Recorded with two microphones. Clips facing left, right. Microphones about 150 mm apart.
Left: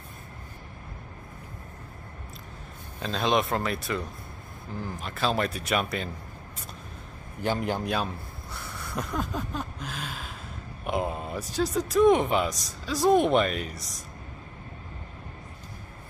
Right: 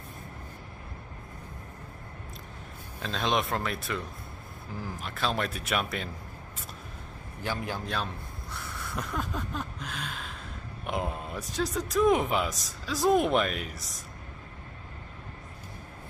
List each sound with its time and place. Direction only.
3.0 s speech: centre (ahead or behind)
7.4 s a man's voice: 20° left (ahead or behind)
8.5 s a sound: centre (ahead or behind)
10.9 s speech: centre (ahead or behind)